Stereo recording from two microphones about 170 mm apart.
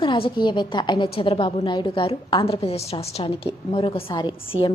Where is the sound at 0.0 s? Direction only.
30° left (ahead or behind).